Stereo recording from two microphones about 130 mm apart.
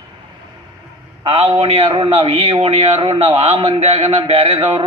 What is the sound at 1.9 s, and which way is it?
A man's voice, 35° right (ahead or behind).